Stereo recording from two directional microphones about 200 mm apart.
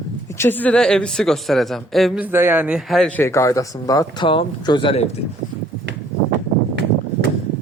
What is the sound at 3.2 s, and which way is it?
Speech, 15° left (ahead or behind).